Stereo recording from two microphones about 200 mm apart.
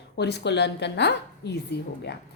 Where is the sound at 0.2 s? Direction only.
55° left (ahead or behind).